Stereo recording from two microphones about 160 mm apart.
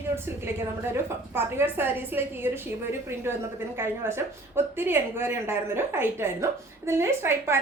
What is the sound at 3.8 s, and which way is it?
A woman's voice, 15° right (ahead or behind).